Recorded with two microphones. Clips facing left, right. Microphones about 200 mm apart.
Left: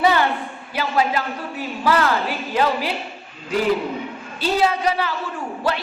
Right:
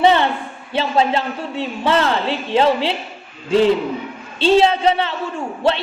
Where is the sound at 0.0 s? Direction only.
25° right (ahead or behind).